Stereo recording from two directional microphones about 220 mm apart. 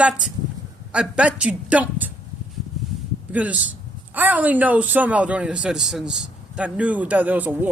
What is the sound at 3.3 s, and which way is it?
Speech, 5° right (ahead or behind).